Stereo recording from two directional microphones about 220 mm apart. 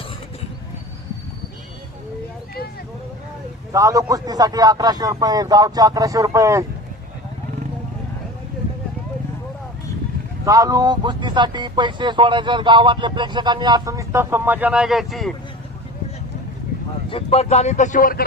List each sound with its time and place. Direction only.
3.7 s a man's voice: 15° right (ahead or behind)
10.4 s speech: 15° right (ahead or behind)
17.1 s speech: 25° left (ahead or behind)